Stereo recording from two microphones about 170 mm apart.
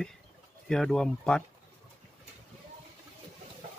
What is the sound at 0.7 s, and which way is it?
Speech, 5° left (ahead or behind).